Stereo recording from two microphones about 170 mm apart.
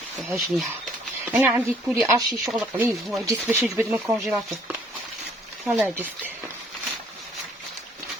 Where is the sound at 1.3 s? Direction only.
15° right (ahead or behind).